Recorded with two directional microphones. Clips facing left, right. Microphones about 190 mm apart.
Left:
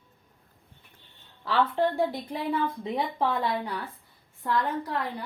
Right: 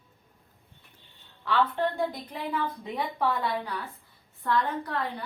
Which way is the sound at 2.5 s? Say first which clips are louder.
Left 4 dB; 25° left (ahead or behind).